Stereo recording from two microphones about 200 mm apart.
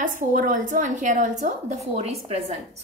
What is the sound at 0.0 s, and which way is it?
A woman's voice, 40° right (ahead or behind).